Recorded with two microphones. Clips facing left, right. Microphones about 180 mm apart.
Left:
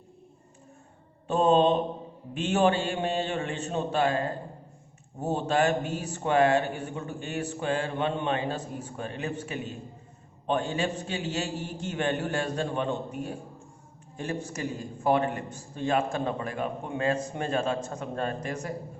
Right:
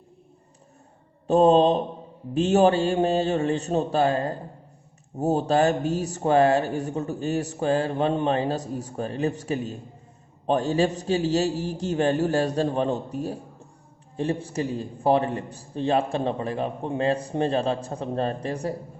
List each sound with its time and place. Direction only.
1.3 s mantra: 40° right (ahead or behind)
2.3 s speech: 40° right (ahead or behind)